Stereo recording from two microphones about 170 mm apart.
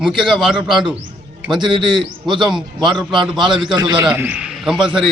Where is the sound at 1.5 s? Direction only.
30° right (ahead or behind).